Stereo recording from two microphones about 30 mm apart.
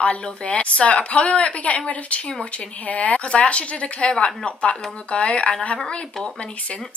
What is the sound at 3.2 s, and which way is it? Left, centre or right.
Speech, left.